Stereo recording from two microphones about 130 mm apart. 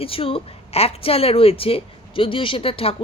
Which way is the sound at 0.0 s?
45° left (ahead or behind).